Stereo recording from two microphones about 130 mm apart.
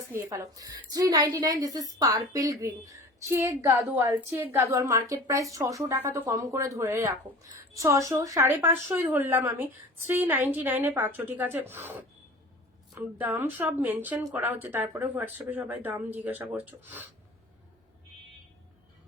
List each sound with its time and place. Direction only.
0.1 s a woman's voice: 20° right (ahead or behind)